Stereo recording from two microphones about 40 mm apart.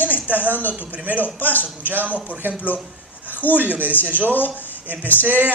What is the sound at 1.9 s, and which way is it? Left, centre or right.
Speech, right.